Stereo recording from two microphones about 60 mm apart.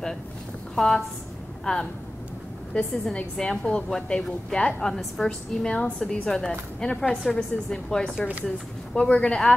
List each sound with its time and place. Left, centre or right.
0.7 s a woman's voice: centre
4.6 s a woman's voice: centre